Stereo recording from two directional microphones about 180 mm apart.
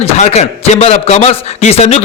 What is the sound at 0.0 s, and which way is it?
A man's voice, 40° left (ahead or behind).